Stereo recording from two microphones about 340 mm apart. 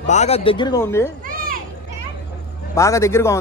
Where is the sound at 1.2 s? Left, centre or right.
Right.